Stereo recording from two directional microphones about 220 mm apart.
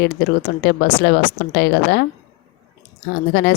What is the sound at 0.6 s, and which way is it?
Speech, 50° left (ahead or behind).